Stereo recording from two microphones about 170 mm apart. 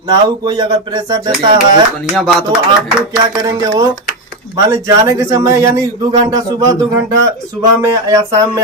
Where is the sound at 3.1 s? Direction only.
20° right (ahead or behind).